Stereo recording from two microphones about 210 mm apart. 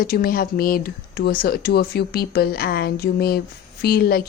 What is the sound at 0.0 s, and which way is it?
A woman's voice, 45° left (ahead or behind).